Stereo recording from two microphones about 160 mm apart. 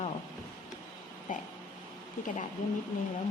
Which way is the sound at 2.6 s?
55° left (ahead or behind).